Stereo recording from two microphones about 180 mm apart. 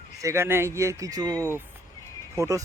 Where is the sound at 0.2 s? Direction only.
15° right (ahead or behind).